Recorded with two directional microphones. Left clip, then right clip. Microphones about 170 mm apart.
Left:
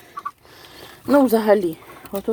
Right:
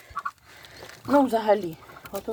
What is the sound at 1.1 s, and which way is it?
Speech, 50° left (ahead or behind).